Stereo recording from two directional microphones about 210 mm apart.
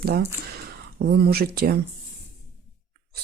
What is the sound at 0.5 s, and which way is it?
Speech, 50° right (ahead or behind).